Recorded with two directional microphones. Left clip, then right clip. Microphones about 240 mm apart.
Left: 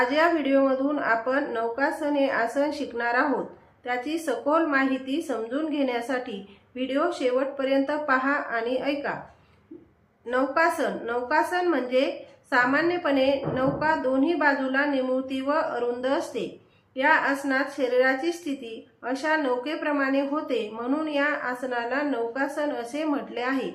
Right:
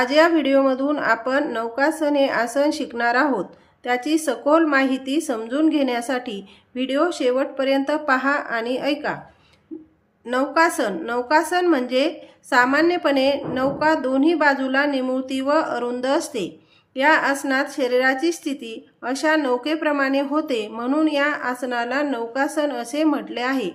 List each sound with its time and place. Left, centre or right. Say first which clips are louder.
0.0 s a woman's voice: right 5 dB; right
10.2 s a woman's voice: right 4 dB; right